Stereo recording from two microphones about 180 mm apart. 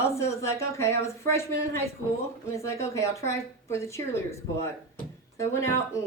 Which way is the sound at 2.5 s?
15° left (ahead or behind).